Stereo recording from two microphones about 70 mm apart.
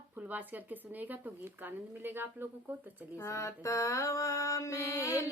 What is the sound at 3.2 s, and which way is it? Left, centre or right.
Mantra, left.